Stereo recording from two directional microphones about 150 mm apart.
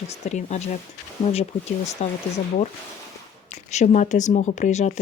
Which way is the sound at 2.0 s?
45° left (ahead or behind).